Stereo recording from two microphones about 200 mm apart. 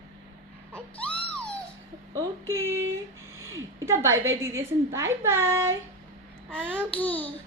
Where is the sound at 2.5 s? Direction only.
15° right (ahead or behind).